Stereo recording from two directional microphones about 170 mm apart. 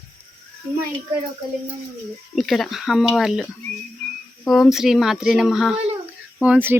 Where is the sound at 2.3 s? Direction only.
Centre (ahead or behind).